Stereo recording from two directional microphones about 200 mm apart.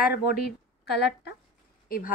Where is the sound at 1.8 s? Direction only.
45° left (ahead or behind).